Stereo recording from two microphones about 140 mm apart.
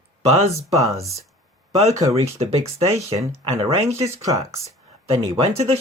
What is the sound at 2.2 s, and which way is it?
Speech, 50° right (ahead or behind).